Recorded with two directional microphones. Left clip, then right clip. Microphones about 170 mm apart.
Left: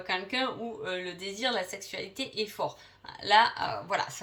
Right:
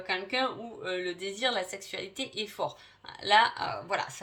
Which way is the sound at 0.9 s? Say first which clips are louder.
Right 4 dB; 40° right (ahead or behind).